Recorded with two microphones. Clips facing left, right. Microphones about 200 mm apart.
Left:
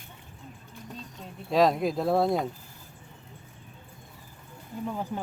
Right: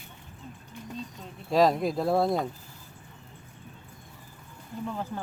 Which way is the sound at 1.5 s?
Centre (ahead or behind).